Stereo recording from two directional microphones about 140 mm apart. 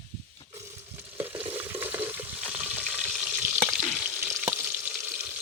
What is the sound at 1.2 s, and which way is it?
Frying, 15° right (ahead or behind).